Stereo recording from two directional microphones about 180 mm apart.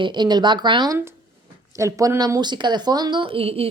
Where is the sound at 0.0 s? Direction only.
25° right (ahead or behind).